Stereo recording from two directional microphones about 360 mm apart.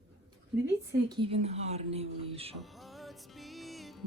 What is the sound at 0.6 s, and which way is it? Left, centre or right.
Speech, centre.